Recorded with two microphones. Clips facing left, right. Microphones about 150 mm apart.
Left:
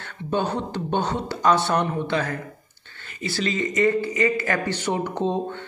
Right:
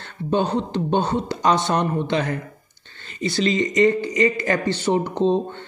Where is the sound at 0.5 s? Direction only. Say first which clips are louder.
Right 4 dB; 15° right (ahead or behind).